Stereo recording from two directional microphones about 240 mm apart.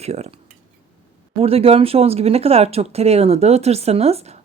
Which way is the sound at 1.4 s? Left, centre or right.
Right.